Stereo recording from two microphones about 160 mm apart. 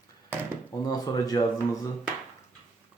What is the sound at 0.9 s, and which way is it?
Speech, 25° left (ahead or behind).